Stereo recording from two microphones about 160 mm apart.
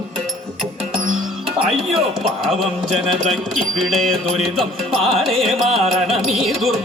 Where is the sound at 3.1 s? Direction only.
Centre (ahead or behind).